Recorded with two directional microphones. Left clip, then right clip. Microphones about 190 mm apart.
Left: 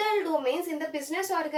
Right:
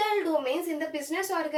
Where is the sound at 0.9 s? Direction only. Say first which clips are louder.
Even; 15° left (ahead or behind).